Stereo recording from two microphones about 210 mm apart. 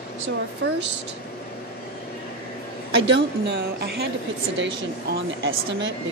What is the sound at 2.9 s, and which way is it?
Speech, 60° right (ahead or behind).